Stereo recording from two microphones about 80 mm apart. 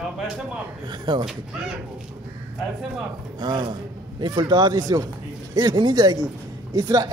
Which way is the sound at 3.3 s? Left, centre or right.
Right.